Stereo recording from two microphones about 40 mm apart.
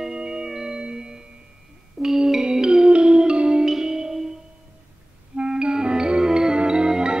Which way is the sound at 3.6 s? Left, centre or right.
Centre.